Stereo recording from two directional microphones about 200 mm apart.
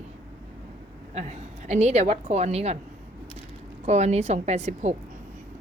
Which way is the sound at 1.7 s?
35° right (ahead or behind).